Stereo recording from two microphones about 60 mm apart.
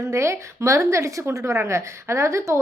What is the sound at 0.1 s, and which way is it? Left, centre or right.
A woman's voice, right.